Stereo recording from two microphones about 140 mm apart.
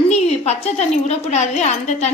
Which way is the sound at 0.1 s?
50° left (ahead or behind).